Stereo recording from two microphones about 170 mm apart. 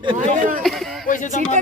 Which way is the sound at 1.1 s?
45° left (ahead or behind).